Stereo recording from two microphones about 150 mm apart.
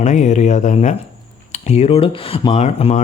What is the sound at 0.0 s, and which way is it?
Speech, 50° left (ahead or behind).